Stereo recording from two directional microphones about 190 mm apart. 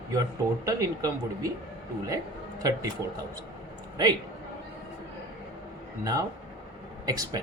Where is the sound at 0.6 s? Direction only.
20° right (ahead or behind).